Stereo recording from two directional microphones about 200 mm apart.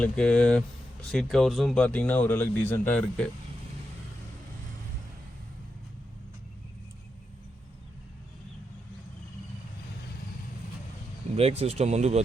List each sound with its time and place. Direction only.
0.0 s speech: 5° left (ahead or behind)
11.3 s speech: 30° right (ahead or behind)